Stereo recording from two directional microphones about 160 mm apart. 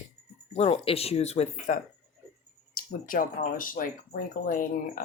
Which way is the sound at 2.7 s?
60° left (ahead or behind).